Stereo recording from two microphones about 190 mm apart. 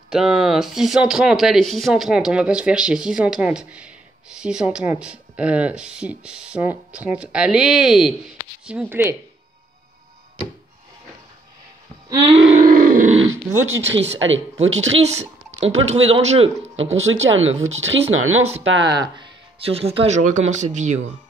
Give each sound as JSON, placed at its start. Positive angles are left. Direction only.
{"t": 0.1, "sound": "speech", "side_deg": 0}
{"t": 12.3, "sound": "speech", "side_deg": -30}
{"t": 12.6, "sound": "grunt", "side_deg": -45}
{"t": 13.7, "sound": "speech", "side_deg": -80}
{"t": 14.2, "sound": "speech", "side_deg": -90}
{"t": 15.0, "sound": "speech", "side_deg": -35}
{"t": 17.0, "sound": "speech", "side_deg": -90}
{"t": 17.5, "sound": "speech", "side_deg": -35}
{"t": 18.1, "sound": "speech", "side_deg": -90}
{"t": 18.9, "sound": "speech", "side_deg": -25}